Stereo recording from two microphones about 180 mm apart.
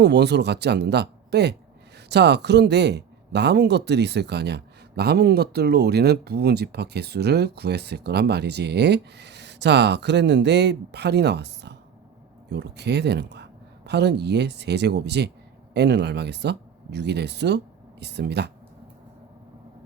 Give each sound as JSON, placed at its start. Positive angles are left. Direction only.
{"t": 0.0, "sound": "speech", "side_deg": -70}